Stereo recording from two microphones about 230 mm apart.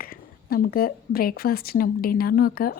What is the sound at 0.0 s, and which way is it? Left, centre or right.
Speech, left.